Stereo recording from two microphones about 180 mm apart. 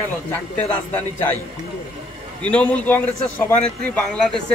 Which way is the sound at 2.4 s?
5° left (ahead or behind).